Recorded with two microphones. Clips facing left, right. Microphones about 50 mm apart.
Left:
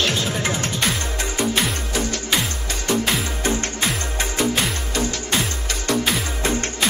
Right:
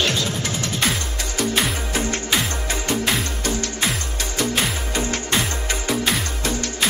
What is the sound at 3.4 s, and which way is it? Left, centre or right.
Music, left.